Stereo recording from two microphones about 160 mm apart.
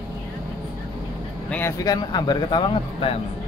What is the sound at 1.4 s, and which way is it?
A man's voice, 15° left (ahead or behind).